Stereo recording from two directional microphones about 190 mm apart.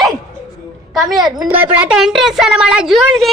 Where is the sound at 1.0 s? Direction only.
20° right (ahead or behind).